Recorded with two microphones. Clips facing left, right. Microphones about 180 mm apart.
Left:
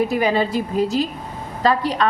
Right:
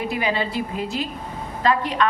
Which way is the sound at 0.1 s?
45° left (ahead or behind).